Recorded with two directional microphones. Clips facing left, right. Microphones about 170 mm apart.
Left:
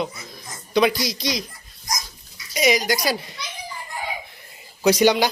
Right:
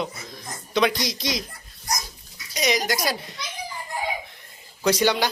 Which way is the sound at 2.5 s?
Centre (ahead or behind).